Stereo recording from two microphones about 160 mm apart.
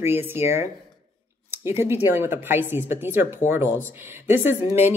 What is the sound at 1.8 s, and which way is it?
Speech, 15° right (ahead or behind).